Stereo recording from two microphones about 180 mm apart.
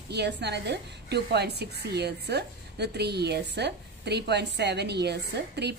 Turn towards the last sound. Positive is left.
turn(degrees=-70)  # may be behind; listen again after turning